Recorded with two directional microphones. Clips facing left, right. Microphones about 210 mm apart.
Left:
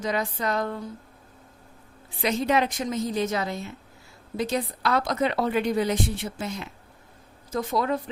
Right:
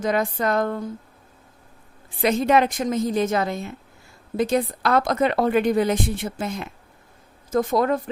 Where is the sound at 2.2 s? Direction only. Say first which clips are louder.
Right 5 dB; 50° right (ahead or behind).